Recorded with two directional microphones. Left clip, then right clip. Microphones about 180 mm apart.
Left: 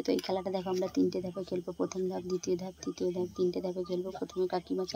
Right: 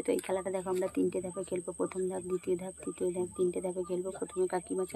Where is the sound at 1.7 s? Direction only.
25° left (ahead or behind).